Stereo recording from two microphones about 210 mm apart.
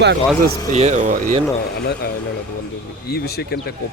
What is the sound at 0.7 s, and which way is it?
Speech, 35° right (ahead or behind).